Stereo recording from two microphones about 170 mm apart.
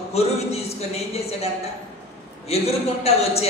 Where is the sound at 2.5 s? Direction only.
35° left (ahead or behind).